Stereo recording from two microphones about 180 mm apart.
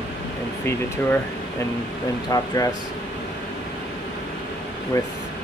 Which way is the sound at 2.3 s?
20° left (ahead or behind).